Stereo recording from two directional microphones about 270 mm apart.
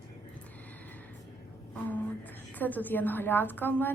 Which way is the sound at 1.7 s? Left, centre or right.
Centre.